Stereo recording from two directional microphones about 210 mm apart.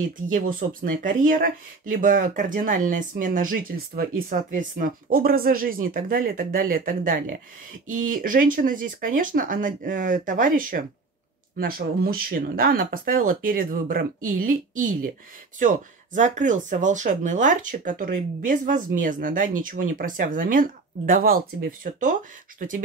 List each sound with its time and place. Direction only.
0.3 s speech: 40° right (ahead or behind)